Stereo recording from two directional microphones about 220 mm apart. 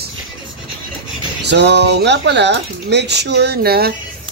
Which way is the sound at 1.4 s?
50° right (ahead or behind).